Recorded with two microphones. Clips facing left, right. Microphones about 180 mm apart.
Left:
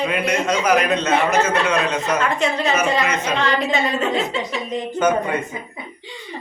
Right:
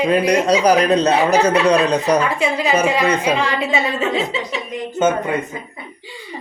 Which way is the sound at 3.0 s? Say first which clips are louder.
Right 5 dB; 30° right (ahead or behind).